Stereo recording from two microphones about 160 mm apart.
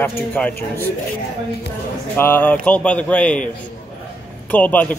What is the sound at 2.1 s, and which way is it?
A man's voice, 10° left (ahead or behind).